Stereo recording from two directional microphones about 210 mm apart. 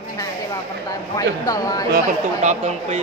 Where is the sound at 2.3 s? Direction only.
35° right (ahead or behind).